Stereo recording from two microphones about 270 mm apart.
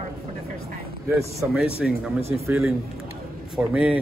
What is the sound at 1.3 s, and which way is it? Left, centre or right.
Speech, centre.